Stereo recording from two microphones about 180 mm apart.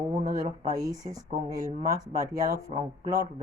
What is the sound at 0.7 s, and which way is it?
Speech, 20° right (ahead or behind).